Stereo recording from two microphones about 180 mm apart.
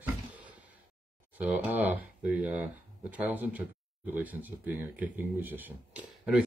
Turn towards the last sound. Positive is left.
turn(degrees=-5)  # may be behind; listen again after turning